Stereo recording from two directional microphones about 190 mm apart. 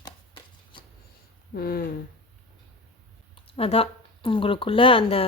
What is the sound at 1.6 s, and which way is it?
Speech, 50° left (ahead or behind).